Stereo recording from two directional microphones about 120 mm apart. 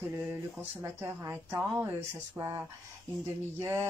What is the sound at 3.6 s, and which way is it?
Speech, 20° right (ahead or behind).